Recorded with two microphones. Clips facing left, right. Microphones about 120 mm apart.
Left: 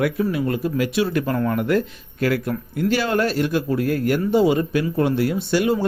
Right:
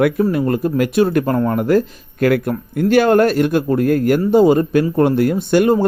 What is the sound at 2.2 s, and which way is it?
Speech, 55° right (ahead or behind).